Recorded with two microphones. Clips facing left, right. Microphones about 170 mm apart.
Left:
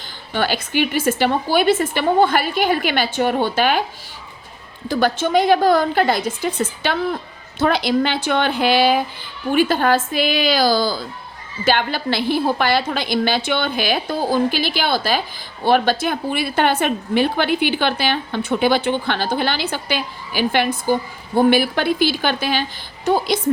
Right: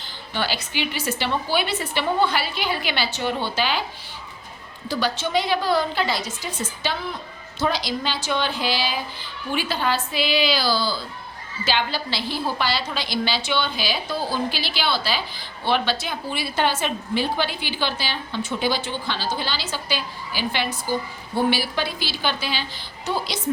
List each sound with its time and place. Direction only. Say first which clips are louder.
0.3 s a woman's voice: left 7 dB; 50° left (ahead or behind)
4.9 s a woman's voice: left 6 dB; 50° left (ahead or behind)